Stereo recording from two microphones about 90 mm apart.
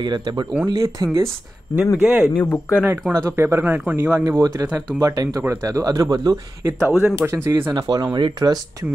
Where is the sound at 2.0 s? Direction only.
10° right (ahead or behind).